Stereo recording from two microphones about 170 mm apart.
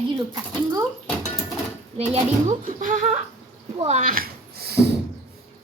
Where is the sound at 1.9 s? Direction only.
35° right (ahead or behind).